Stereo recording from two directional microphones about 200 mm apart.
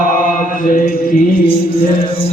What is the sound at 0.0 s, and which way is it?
Mantra, 40° left (ahead or behind).